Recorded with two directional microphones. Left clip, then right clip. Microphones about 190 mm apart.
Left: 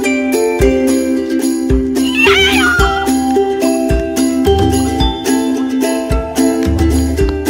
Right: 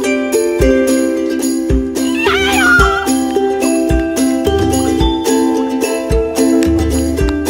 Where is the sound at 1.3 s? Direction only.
Centre (ahead or behind).